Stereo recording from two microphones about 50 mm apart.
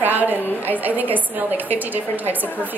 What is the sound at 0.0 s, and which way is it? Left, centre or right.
A woman's voice, right.